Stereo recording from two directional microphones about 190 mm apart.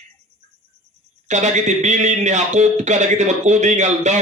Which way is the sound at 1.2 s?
40° right (ahead or behind).